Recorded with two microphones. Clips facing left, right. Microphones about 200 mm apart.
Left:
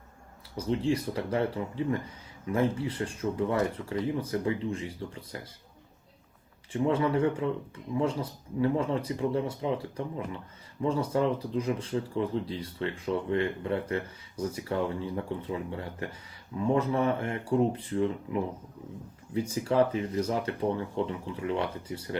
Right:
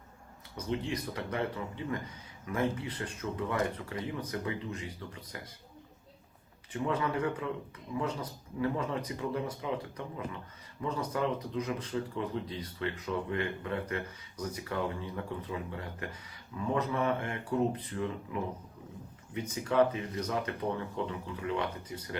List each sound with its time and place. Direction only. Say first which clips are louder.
0.5 s speech: left 6 dB; 30° left (ahead or behind)
6.7 s speech: left 6 dB; 30° left (ahead or behind)
19.3 s speech: left 5 dB; 30° left (ahead or behind)